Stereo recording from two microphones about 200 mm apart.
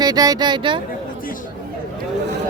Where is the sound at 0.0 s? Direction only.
20° right (ahead or behind).